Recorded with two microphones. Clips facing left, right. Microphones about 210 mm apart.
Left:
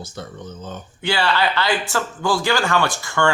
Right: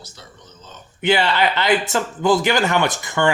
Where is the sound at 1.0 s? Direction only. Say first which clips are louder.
Right 3 dB; 20° right (ahead or behind).